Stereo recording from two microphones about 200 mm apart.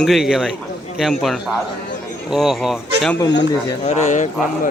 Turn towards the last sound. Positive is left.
turn(degrees=35)  # may be behind; listen again after turning